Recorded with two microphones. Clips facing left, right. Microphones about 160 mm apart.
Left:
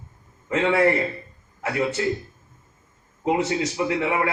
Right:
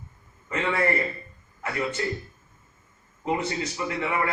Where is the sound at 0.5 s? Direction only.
90° left.